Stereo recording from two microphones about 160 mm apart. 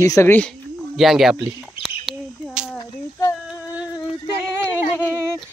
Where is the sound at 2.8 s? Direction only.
20° left (ahead or behind).